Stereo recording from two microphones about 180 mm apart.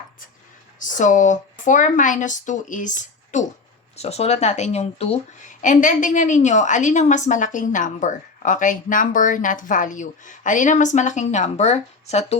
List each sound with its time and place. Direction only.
0.8 s speech: 45° left (ahead or behind)